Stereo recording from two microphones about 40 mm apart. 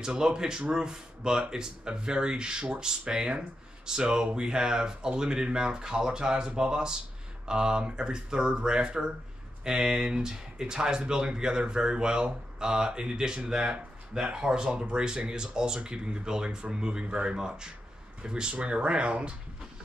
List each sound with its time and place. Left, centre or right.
0.0 s speech: centre